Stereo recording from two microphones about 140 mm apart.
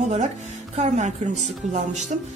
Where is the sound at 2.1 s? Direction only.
65° right (ahead or behind).